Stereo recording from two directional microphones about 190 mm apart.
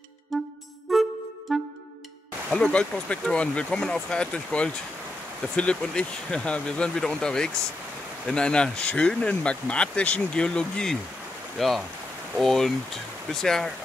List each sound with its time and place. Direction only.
0.3 s music: centre (ahead or behind)
2.5 s speech: 5° left (ahead or behind)